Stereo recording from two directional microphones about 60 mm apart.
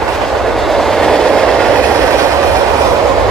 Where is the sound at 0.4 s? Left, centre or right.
Centre.